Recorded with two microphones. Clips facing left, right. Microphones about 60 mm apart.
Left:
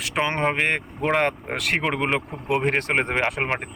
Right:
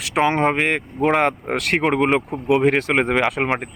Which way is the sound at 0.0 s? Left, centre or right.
Right.